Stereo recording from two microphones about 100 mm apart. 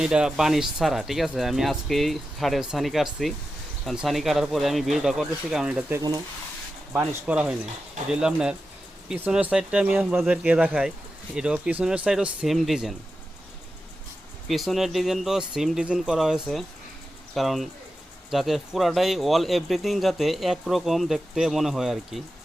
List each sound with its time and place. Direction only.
0.0 s speech: 5° right (ahead or behind)
6.0 s speech: 40° right (ahead or behind)
6.9 s speech: 10° right (ahead or behind)
14.4 s speech: centre (ahead or behind)